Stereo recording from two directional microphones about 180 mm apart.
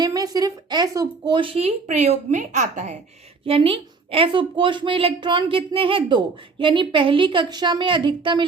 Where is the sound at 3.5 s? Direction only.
30° right (ahead or behind).